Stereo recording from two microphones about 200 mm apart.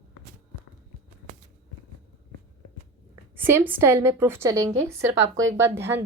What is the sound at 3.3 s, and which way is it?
A woman's voice, 10° right (ahead or behind).